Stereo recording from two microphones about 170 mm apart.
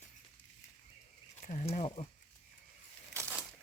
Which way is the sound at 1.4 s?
45° left (ahead or behind).